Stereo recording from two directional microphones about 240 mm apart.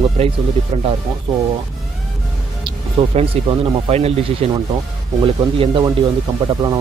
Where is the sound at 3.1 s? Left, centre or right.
Right.